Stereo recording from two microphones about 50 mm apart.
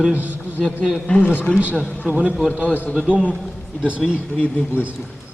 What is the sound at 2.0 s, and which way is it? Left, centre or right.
Speech, right.